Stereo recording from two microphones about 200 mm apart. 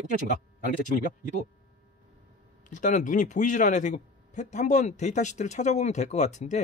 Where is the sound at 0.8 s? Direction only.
40° left (ahead or behind).